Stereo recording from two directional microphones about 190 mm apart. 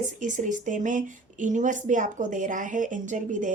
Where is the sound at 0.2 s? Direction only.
40° right (ahead or behind).